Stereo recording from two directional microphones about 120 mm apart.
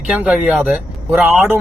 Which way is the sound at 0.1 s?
5° right (ahead or behind).